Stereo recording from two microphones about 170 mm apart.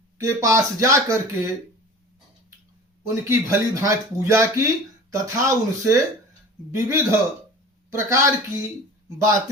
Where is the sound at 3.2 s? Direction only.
15° right (ahead or behind).